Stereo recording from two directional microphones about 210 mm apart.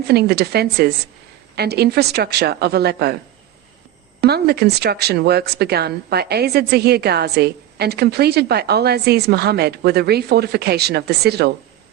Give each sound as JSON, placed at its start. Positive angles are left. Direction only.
{"t": 0.1, "sound": "speech", "side_deg": -50}
{"t": 4.2, "sound": "speech", "side_deg": -50}